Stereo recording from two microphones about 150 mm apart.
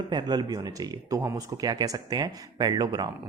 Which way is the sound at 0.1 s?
30° right (ahead or behind).